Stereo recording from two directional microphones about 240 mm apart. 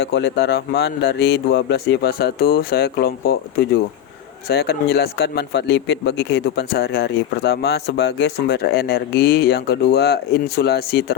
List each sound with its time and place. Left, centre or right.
0.0 s a man's voice: left